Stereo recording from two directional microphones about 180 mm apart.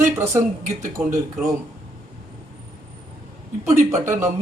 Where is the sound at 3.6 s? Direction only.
15° right (ahead or behind).